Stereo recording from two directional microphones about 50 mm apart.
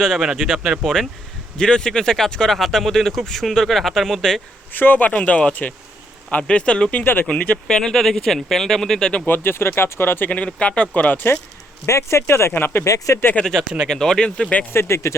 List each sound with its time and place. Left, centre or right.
0.2 s speech: centre
1.5 s speech: centre
4.7 s speech: left; by 7.0 s centre
7.0 s speech: left
7.3 s speech: left
7.8 s speech: centre
9.2 s speech: left
10.2 s speech: left
11.9 s speech: left
12.8 s speech: left
13.4 s speech: centre
14.7 s speech: left